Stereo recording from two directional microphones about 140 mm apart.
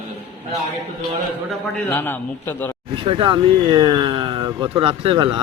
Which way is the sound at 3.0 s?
40° right (ahead or behind).